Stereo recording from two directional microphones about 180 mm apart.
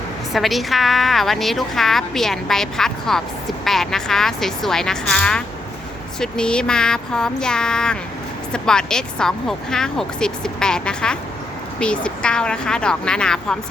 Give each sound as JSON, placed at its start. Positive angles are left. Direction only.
{"t": 0.3, "sound": "a woman's voice", "side_deg": 0}